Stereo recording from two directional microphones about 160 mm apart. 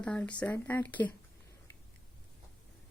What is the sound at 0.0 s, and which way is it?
A woman's voice, 10° left (ahead or behind).